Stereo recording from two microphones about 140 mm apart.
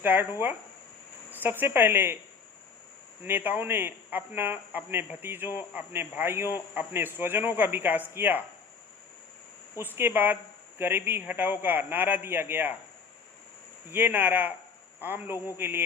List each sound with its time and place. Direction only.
0.0 s speech: 15° right (ahead or behind)
3.2 s speech: 15° right (ahead or behind)
9.7 s speech: 15° right (ahead or behind)
13.9 s speech: 15° right (ahead or behind)